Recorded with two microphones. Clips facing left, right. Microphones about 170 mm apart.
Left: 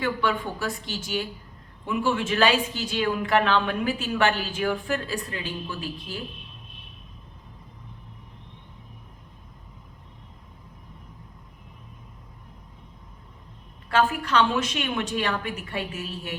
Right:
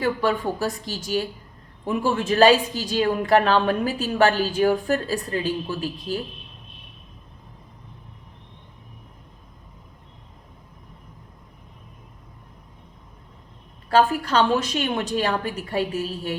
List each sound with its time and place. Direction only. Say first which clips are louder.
0.0 s a man's voice: right 4 dB; 40° right (ahead or behind)
13.9 s a man's voice: right 3 dB; 35° right (ahead or behind)